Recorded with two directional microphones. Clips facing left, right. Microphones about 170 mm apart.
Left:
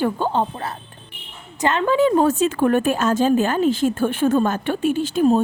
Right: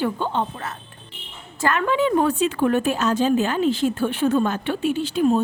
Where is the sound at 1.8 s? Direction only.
40° left (ahead or behind).